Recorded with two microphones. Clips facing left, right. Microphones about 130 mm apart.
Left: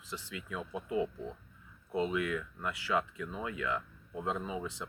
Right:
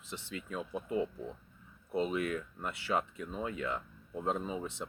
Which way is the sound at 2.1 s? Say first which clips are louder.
Even; 35° right (ahead or behind).